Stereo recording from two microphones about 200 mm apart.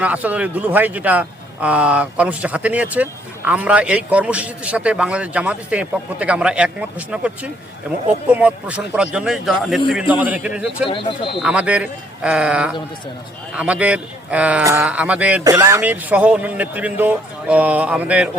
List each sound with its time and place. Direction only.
0.0 s a man's voice: 5° right (ahead or behind)
10.8 s speech: 25° left (ahead or behind)
11.3 s a man's voice: 5° right (ahead or behind)